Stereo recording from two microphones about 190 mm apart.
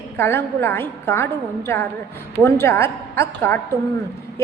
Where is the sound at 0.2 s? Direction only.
10° left (ahead or behind).